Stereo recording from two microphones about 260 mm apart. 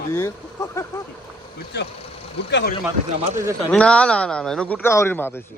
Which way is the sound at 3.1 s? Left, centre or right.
Right.